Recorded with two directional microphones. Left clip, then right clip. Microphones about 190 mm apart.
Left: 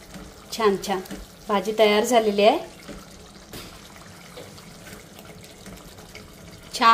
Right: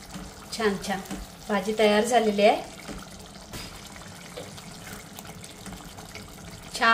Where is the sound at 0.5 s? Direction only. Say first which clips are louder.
Left 5 dB; 35° left (ahead or behind).